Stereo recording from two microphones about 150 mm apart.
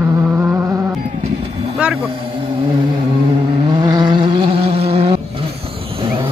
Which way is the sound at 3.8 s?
30° right (ahead or behind).